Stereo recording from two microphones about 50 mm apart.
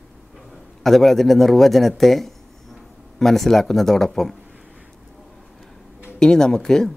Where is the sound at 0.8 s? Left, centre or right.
Centre.